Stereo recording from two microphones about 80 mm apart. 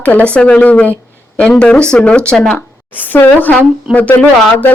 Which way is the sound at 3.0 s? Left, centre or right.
Left.